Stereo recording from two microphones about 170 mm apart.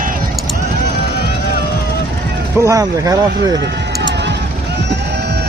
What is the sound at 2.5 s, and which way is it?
Speech, 20° right (ahead or behind).